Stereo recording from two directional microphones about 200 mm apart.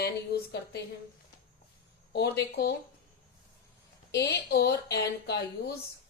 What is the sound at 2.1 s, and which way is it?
Speech, 55° left (ahead or behind).